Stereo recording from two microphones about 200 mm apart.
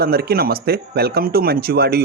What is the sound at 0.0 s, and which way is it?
Speech, 50° right (ahead or behind).